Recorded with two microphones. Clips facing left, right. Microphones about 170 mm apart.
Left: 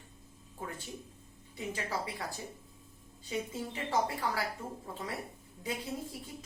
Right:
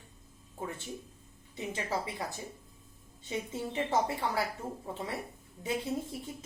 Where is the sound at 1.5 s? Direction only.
20° right (ahead or behind).